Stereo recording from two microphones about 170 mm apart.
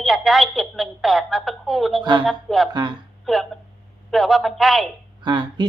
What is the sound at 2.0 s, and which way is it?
Mantra, 25° right (ahead or behind).